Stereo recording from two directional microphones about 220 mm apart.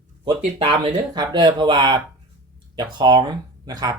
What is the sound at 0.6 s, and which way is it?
Speech, 25° right (ahead or behind).